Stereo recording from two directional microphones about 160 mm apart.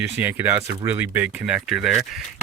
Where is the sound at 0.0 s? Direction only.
15° right (ahead or behind).